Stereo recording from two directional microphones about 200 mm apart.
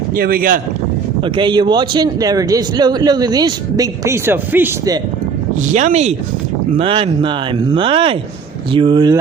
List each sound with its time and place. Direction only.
0.2 s speech: 50° right (ahead or behind)
1.2 s speech: 25° right (ahead or behind)
5.7 s speech: 35° right (ahead or behind)